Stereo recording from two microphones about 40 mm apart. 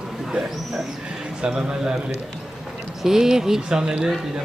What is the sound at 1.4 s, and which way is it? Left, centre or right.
Speech, right.